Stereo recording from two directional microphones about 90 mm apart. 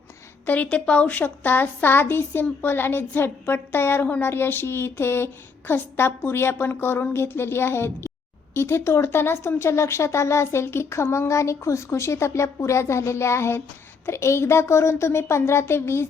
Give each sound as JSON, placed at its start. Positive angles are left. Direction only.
{"t": 0.4, "sound": "a woman's voice", "side_deg": 15}